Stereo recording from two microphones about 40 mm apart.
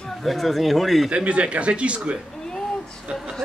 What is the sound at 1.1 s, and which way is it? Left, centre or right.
Speech, right.